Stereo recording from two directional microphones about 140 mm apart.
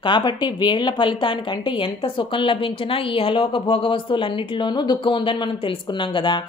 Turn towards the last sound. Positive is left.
turn(degrees=35)  # may be behind; listen again after turning